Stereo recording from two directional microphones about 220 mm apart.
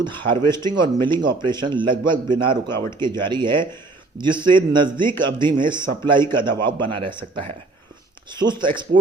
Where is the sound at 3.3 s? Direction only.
20° right (ahead or behind).